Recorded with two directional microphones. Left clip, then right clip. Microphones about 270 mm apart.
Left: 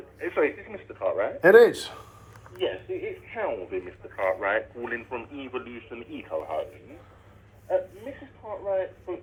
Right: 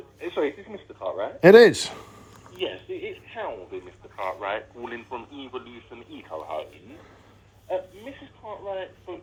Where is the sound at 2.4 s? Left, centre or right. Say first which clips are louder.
Left 2 dB; centre.